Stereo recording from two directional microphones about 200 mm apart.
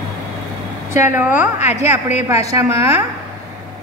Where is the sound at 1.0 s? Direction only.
10° right (ahead or behind).